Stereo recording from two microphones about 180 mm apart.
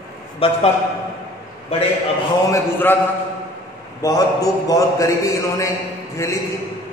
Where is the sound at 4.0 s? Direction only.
20° left (ahead or behind).